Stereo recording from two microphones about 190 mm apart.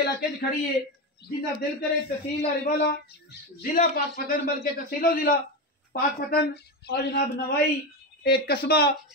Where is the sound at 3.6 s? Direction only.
50° left (ahead or behind).